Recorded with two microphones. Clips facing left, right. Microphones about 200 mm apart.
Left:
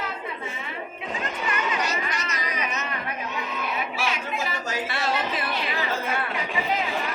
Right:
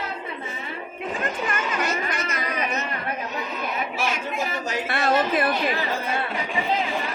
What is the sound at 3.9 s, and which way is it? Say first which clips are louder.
Chatter: right 2 dB; 45° right (ahead or behind).